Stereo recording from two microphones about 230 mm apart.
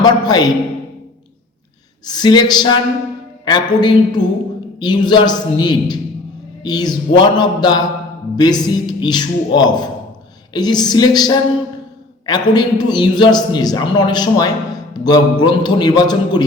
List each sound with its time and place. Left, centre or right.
0.0 s a man's voice: centre
2.0 s a man's voice: centre